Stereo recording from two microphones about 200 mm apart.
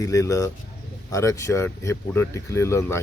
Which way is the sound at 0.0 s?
15° left (ahead or behind).